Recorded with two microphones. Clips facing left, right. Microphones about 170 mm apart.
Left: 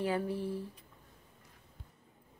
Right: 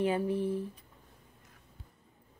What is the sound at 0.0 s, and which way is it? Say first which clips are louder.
Speech: right 4 dB; 20° right (ahead or behind).